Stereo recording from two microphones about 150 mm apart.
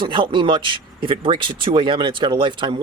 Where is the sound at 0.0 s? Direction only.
35° right (ahead or behind).